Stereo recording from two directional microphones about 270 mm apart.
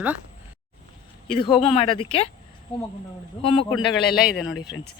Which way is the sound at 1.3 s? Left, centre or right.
Centre.